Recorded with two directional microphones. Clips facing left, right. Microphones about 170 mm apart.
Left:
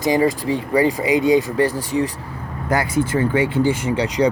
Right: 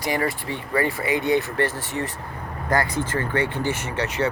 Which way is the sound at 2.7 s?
10° left (ahead or behind).